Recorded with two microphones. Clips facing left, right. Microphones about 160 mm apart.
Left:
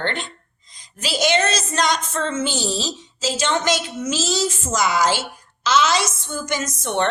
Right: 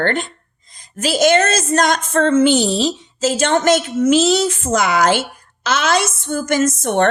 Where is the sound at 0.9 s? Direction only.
50° right (ahead or behind).